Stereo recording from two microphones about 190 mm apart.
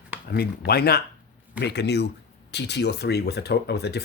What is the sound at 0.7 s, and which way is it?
Speech, 55° left (ahead or behind).